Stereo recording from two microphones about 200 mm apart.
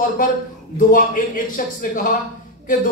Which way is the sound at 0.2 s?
45° left (ahead or behind).